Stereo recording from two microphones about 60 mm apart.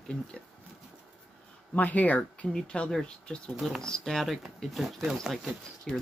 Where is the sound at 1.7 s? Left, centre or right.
Left.